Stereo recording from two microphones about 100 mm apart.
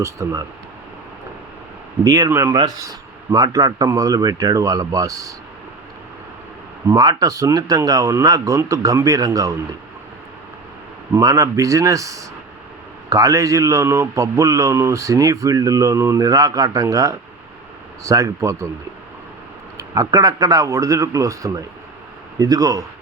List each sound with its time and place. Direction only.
0.0 s a man's voice: 30° right (ahead or behind)
2.0 s a man's voice: 35° right (ahead or behind)
6.8 s a man's voice: 40° right (ahead or behind)
11.1 s a man's voice: 35° right (ahead or behind)
19.7 s a man's voice: 35° right (ahead or behind)